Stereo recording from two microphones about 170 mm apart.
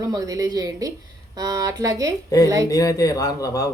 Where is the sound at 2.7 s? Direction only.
20° left (ahead or behind).